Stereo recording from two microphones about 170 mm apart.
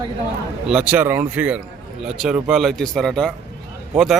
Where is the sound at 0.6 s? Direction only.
5° right (ahead or behind).